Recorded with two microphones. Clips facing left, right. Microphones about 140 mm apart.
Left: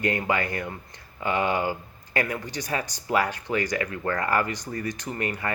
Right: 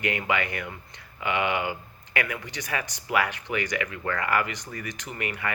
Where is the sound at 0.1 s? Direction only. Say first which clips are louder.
Left 2 dB; 35° left (ahead or behind).